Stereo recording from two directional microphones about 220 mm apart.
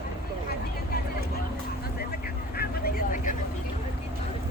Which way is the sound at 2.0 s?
45° left (ahead or behind).